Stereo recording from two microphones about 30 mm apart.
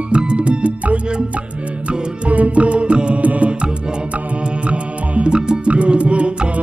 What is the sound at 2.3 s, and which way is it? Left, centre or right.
Music, right.